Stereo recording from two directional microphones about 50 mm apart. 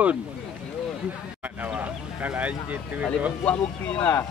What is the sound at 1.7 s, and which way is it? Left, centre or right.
Speech, right.